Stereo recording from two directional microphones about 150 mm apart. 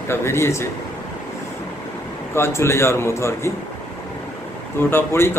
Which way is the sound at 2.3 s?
15° left (ahead or behind).